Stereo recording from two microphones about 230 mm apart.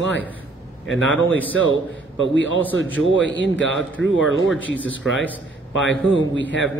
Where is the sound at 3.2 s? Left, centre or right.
Left.